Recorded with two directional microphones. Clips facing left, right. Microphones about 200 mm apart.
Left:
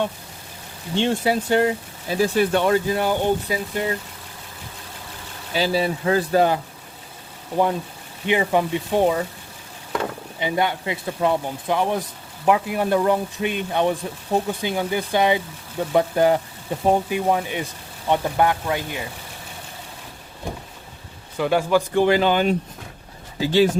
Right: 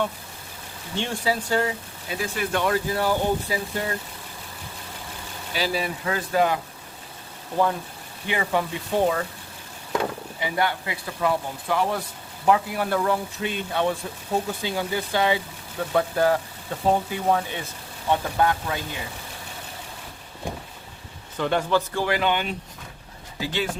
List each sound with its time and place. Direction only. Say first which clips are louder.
0.9 s speech: left 6 dB; 25° left (ahead or behind)
2.0 s speech: left 9 dB; 35° left (ahead or behind)
5.5 s speech: left 5 dB; 30° left (ahead or behind)
7.5 s speech: left 2 dB; 20° left (ahead or behind)
10.4 s speech: left 3 dB; 20° left (ahead or behind)
21.3 s speech: left 4 dB; 10° left (ahead or behind)
22.0 s speech: left 6 dB; 30° left (ahead or behind)